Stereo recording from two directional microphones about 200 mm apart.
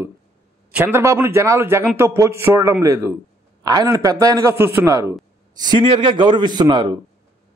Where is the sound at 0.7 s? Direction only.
5° right (ahead or behind).